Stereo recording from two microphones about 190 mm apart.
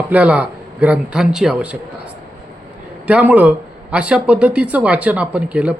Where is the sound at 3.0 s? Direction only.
5° right (ahead or behind).